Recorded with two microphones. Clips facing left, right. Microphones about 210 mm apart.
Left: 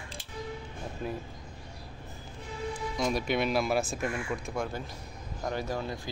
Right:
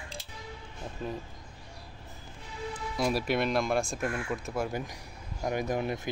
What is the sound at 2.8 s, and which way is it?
Speech, 5° right (ahead or behind).